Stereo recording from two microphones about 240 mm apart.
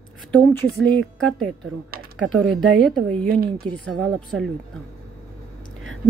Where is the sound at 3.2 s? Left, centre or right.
Right.